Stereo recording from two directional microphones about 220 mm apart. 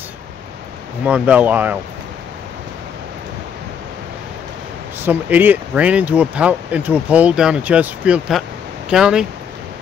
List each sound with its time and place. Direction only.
1.0 s speech: 5° right (ahead or behind)
5.0 s speech: 10° right (ahead or behind)